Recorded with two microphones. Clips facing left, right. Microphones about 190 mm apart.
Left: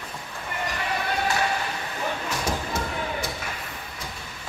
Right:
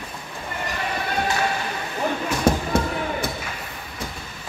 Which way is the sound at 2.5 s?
60° right (ahead or behind).